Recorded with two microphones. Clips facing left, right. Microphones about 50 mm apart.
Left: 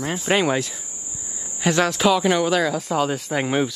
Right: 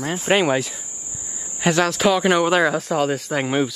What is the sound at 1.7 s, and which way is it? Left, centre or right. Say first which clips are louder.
Speech: right 1 dB; centre.